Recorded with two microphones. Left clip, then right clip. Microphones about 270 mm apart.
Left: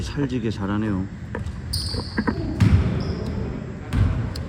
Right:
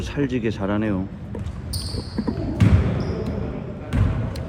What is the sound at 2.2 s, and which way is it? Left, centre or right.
Basketball bounce, right.